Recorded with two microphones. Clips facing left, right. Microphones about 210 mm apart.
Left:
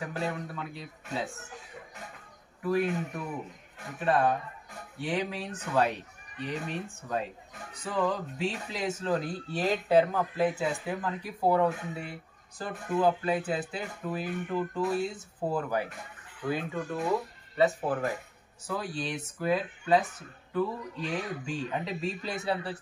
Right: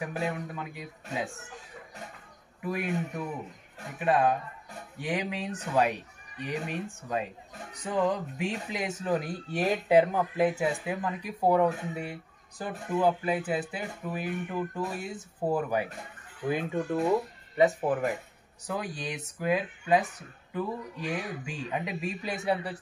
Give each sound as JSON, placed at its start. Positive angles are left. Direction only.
{"t": 0.1, "sound": "speech", "side_deg": -20}
{"t": 2.6, "sound": "speech", "side_deg": -15}
{"t": 4.0, "sound": "speech", "side_deg": -15}